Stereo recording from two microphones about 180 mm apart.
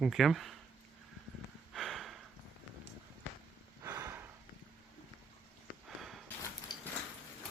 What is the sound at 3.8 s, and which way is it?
Snort, 15° right (ahead or behind).